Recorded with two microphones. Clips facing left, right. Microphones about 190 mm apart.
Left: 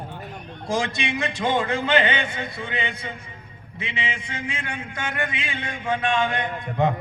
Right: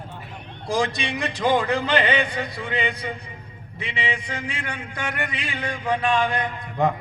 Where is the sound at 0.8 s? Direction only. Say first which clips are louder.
Right 1 dB; 35° right (ahead or behind).